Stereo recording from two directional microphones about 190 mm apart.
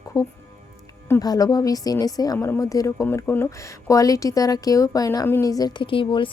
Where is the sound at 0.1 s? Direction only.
15° left (ahead or behind).